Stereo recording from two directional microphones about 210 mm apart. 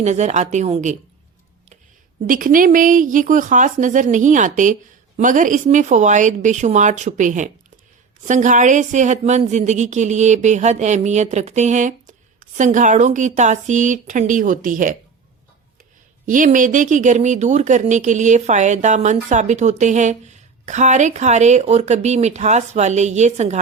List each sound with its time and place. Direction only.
0.0 s speech: 35° right (ahead or behind)
2.2 s speech: 40° right (ahead or behind)
16.2 s speech: 40° right (ahead or behind)